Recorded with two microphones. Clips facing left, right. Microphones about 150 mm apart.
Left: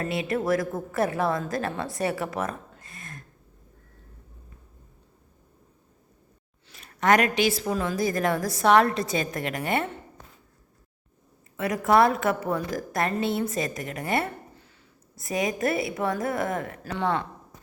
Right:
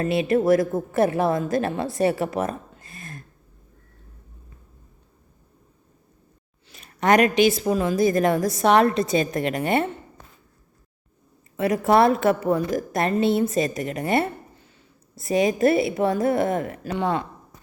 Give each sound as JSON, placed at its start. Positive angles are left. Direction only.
{"t": 0.0, "sound": "a woman's voice", "side_deg": -25}
{"t": 6.7, "sound": "a woman's voice", "side_deg": -20}
{"t": 11.5, "sound": "a woman's voice", "side_deg": -25}